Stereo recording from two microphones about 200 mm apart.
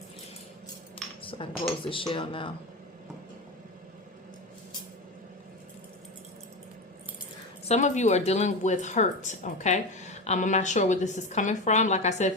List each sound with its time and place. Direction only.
1.2 s speech: 25° left (ahead or behind)
7.7 s speech: 35° left (ahead or behind)